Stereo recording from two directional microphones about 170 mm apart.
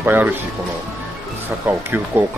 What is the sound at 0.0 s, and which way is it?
Speech, 10° right (ahead or behind).